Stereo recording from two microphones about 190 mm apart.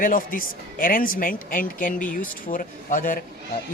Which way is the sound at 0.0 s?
50° left (ahead or behind).